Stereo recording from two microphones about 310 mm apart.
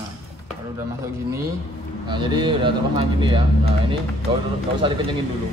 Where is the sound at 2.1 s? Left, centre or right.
Centre.